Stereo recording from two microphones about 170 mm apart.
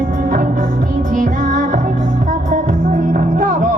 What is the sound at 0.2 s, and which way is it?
Music, 55° right (ahead or behind).